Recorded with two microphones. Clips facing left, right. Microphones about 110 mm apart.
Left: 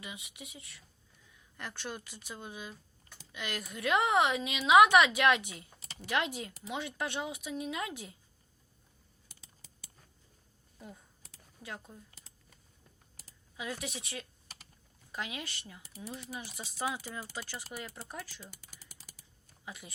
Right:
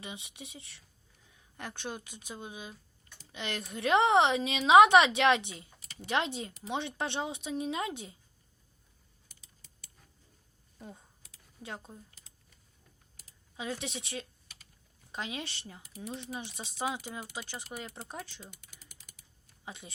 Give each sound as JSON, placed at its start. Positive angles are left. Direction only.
{"t": 0.0, "sound": "a woman's voice", "side_deg": -30}
{"t": 10.8, "sound": "a woman's voice", "side_deg": -25}
{"t": 13.6, "sound": "a woman's voice", "side_deg": -25}
{"t": 18.6, "sound": "typing", "side_deg": 35}
{"t": 19.6, "sound": "speech", "side_deg": -25}